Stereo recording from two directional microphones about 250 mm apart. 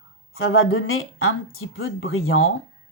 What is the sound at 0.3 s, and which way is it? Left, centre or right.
Speech, left.